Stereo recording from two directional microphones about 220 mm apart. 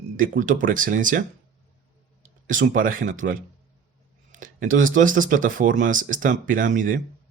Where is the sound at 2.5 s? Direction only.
40° right (ahead or behind).